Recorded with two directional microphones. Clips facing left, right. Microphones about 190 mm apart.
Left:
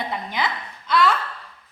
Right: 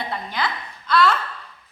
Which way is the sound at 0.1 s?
20° left (ahead or behind).